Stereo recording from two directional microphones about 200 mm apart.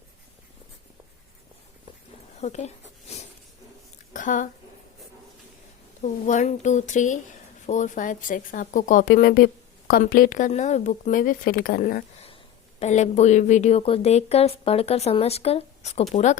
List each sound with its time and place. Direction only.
2.4 s a woman's voice: 35° left (ahead or behind)
4.1 s a sound: 40° left (ahead or behind)
6.0 s a woman's voice: 35° left (ahead or behind)
12.8 s a woman's voice: 35° left (ahead or behind)